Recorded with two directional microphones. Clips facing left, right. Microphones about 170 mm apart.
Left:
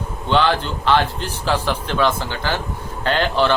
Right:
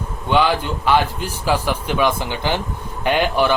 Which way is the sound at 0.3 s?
10° right (ahead or behind).